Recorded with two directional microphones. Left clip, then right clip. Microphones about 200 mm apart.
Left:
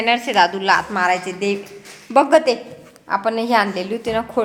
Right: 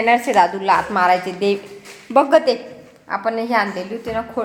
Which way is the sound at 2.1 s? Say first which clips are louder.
Even; centre (ahead or behind).